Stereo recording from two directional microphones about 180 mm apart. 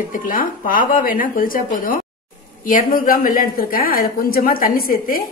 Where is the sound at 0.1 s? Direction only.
50° left (ahead or behind).